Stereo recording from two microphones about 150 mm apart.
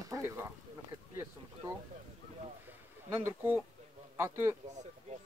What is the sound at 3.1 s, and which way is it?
Speech, 15° right (ahead or behind).